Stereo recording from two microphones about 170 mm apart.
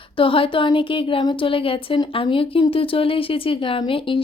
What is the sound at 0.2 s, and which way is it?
Speech, 30° left (ahead or behind).